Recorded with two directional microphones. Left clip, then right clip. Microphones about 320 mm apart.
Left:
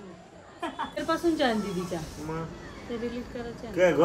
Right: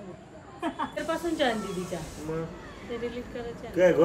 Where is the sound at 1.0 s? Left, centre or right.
Left.